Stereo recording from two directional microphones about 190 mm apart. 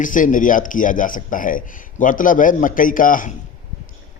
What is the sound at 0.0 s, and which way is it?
A man's voice, 45° left (ahead or behind).